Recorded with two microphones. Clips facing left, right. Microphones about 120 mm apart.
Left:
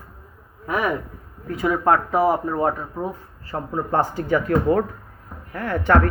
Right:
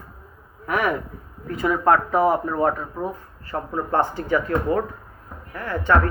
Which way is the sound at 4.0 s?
40° left (ahead or behind).